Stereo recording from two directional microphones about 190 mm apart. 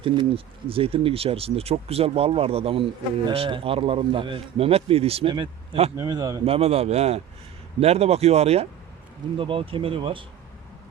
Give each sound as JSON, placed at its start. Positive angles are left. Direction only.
{"t": 0.0, "sound": "a man's voice", "side_deg": -30}
{"t": 6.4, "sound": "a man's voice", "side_deg": -30}